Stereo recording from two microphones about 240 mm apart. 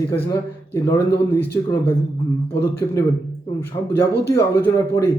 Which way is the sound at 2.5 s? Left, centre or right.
Centre.